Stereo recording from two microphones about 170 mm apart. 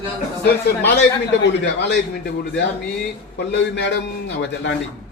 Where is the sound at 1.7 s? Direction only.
90° left.